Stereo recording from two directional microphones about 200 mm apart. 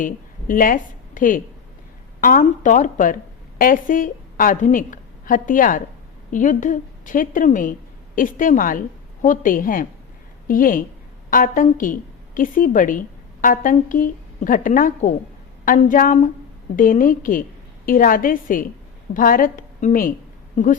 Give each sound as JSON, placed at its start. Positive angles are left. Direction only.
{"t": 0.0, "sound": "a woman's voice", "side_deg": 45}